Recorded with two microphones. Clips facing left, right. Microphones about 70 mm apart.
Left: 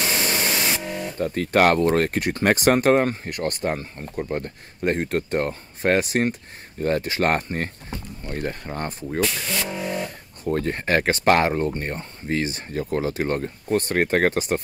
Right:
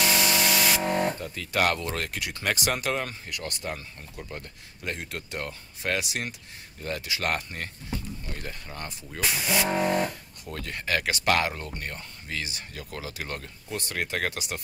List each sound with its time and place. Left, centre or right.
0.0 s spray: left
0.8 s music: right
1.2 s speech: left
9.2 s speech: centre
9.7 s a sound: right
10.4 s speech: left